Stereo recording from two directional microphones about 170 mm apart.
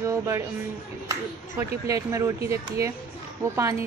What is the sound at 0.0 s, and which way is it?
Speech, 20° right (ahead or behind).